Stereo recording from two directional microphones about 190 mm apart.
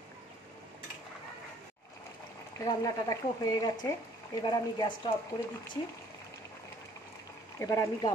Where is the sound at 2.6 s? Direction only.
20° left (ahead or behind).